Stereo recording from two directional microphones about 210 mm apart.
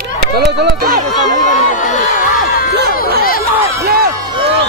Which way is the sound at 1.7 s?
35° left (ahead or behind).